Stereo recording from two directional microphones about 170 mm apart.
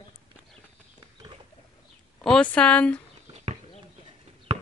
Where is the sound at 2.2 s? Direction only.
5° left (ahead or behind).